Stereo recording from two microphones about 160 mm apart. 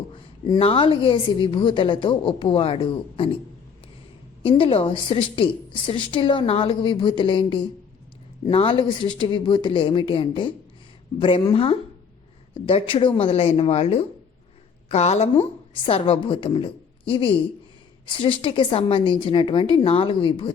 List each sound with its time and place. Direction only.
0.1 s a sound: 25° left (ahead or behind)
0.6 s a woman's voice: 35° left (ahead or behind)
4.4 s a woman's voice: 35° left (ahead or behind)